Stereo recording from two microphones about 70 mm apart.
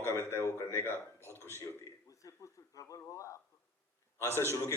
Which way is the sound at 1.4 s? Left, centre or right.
Left.